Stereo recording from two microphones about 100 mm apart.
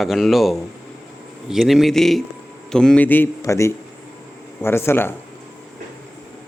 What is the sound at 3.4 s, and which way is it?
Speech, 30° left (ahead or behind).